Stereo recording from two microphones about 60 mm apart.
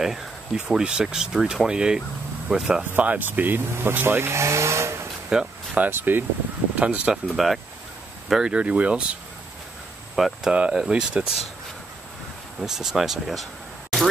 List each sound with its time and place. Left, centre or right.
0.7 s speech: centre
3.0 s speech: right
5.3 s speech: centre
5.8 s speech: right
6.8 s speech: right
7.3 s speech: centre
8.3 s speech: centre
10.1 s speech: centre
10.5 s speech: centre
12.5 s speech: centre